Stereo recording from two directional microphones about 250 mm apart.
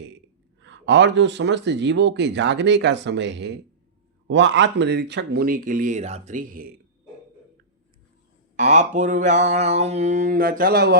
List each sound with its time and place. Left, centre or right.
0.6 s speech: right
8.5 s mantra: right